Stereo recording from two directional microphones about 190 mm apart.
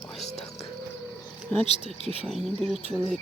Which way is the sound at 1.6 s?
35° left (ahead or behind).